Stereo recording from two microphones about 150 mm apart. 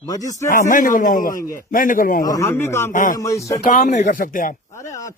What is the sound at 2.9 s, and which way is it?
Speech, 60° left (ahead or behind).